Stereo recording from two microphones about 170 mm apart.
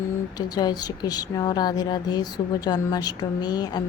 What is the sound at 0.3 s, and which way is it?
Speech, 25° left (ahead or behind).